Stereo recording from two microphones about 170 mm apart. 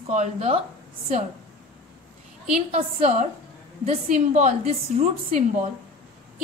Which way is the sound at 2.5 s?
45° right (ahead or behind).